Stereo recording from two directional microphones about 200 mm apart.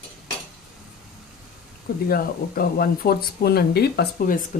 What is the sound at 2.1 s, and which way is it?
Speech, 45° left (ahead or behind).